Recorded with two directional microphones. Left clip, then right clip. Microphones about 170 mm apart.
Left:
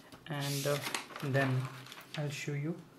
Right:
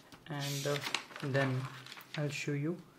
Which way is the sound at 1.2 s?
25° right (ahead or behind).